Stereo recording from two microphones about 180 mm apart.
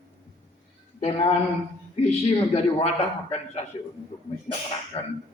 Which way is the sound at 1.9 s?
35° left (ahead or behind).